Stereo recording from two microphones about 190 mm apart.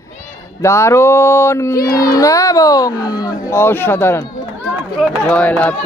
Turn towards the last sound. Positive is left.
turn(degrees=5)  # may be behind; listen again after turning